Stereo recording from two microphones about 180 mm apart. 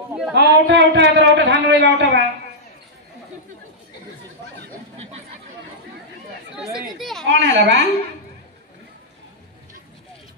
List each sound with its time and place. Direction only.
0.3 s a man's voice: 70° right (ahead or behind)
6.6 s speech: centre (ahead or behind)
7.2 s a woman's voice: 80° right